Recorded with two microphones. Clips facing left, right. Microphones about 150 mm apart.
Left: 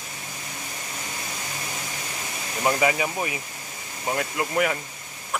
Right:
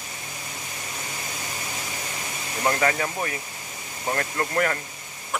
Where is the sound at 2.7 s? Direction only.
10° left (ahead or behind).